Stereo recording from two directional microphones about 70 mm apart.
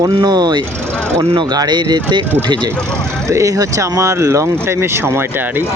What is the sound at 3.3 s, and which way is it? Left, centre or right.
Speech, right.